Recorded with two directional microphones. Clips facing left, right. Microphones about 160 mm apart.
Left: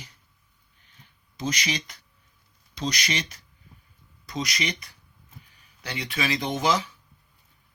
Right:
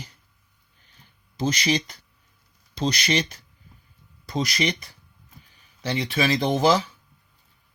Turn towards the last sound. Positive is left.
turn(degrees=-30)  # may be behind; listen again after turning